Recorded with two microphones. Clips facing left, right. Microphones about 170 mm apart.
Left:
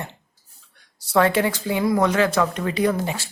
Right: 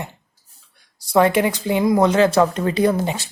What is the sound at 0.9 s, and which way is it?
Speech, 15° right (ahead or behind).